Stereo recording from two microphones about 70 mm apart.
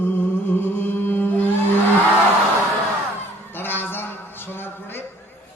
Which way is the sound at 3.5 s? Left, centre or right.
Left.